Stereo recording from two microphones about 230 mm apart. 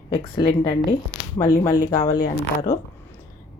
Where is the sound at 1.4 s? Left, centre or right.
Centre.